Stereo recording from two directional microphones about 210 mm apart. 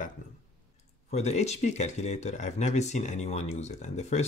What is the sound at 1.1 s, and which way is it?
Speech, 30° left (ahead or behind).